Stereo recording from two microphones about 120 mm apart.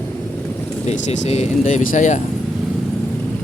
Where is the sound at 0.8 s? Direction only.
70° left (ahead or behind); by 2.2 s 90° left.